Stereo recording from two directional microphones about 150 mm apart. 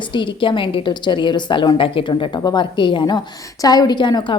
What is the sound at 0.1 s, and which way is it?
A woman's voice, 35° left (ahead or behind).